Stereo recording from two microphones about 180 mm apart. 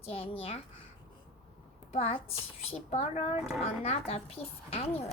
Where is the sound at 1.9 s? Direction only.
35° left (ahead or behind).